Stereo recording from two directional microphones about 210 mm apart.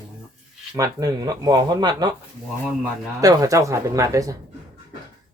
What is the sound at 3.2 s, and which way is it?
Speech, 15° right (ahead or behind).